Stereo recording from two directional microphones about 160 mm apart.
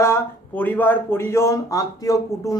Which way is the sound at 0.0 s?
15° left (ahead or behind).